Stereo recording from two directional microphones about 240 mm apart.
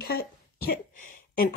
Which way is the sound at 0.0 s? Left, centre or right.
Left.